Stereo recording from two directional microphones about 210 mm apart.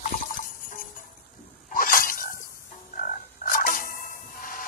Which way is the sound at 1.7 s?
40° left (ahead or behind).